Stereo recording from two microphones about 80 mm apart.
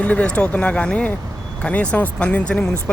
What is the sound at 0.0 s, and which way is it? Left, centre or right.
Speech, centre.